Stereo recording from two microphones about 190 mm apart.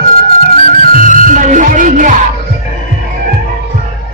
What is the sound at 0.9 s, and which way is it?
Music, 45° right (ahead or behind).